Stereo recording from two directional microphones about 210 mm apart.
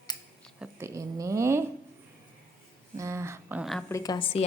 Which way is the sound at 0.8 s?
15° right (ahead or behind).